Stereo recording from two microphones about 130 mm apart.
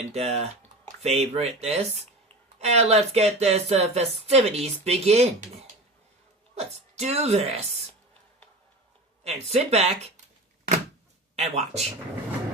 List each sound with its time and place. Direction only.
0.0 s speech: 55° right (ahead or behind)
6.6 s speech: 55° right (ahead or behind)
9.2 s speech: 55° right (ahead or behind)
11.3 s speech: 55° right (ahead or behind)